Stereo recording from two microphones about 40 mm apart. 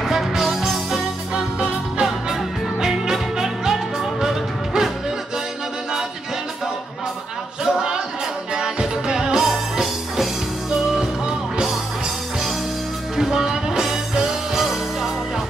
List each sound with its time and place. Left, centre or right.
0.0 s music: centre
1.3 s music: centre
7.6 s a sound: centre
8.5 s music: centre
13.1 s music: centre